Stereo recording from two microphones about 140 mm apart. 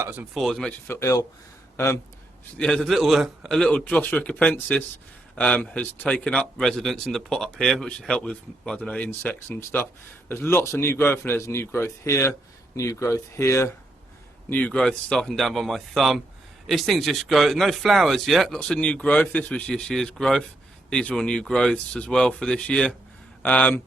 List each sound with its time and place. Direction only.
0.3 s speech: centre (ahead or behind)
0.9 s speech: 20° left (ahead or behind)
2.6 s speech: 5° left (ahead or behind); by 13.7 s 20° left (ahead or behind)
14.5 s speech: 5° left (ahead or behind)